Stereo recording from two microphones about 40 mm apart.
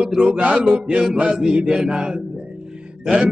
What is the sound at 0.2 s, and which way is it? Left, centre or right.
Music, right.